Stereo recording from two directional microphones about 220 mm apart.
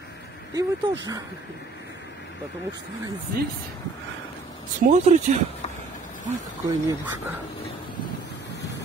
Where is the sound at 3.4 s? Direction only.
45° right (ahead or behind).